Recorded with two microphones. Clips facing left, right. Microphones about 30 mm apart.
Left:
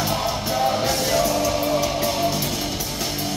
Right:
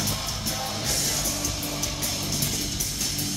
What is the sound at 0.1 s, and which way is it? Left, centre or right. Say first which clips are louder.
Music: left 8 dB; left.